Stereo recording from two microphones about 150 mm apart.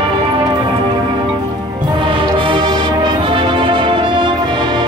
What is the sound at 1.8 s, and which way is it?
Music, 35° right (ahead or behind).